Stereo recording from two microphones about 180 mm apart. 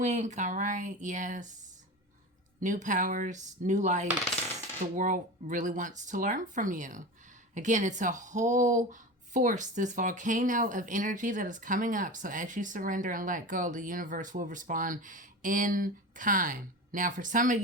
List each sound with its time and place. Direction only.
0.0 s speech: 40° right (ahead or behind)
2.6 s speech: 45° right (ahead or behind)